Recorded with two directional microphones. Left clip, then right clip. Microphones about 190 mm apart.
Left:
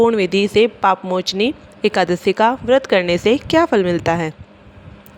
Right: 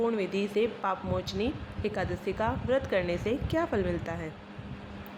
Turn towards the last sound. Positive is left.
turn(degrees=55)  # may be behind; listen again after turning